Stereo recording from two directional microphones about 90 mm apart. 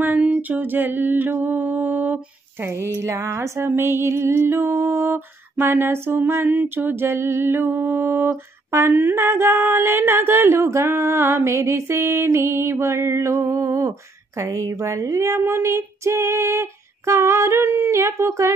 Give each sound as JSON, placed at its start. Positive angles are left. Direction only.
{"t": 0.0, "sound": "a sound", "side_deg": -20}
{"t": 2.6, "sound": "music", "side_deg": -25}
{"t": 14.4, "sound": "speech", "side_deg": -40}